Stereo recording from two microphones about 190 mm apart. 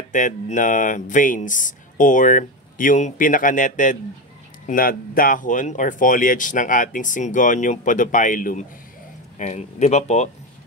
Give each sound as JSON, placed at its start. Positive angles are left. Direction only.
{"t": 0.1, "sound": "speech", "side_deg": 40}